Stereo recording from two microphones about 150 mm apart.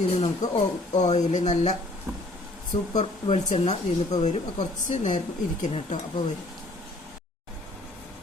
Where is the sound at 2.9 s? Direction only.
45° left (ahead or behind).